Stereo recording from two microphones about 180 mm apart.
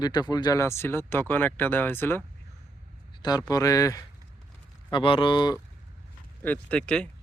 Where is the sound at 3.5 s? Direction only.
20° left (ahead or behind).